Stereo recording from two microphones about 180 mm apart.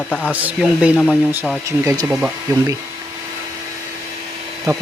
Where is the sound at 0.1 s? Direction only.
5° left (ahead or behind).